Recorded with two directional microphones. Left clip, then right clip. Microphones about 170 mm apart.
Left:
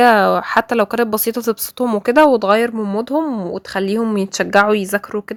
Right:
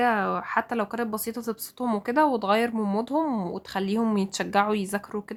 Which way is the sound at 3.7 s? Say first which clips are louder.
Left 8 dB; 35° left (ahead or behind).